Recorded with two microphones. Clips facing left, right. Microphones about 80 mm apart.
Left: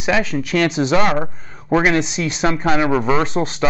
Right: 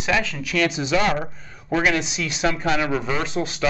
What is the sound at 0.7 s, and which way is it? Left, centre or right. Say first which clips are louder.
Speech: left 7 dB; left.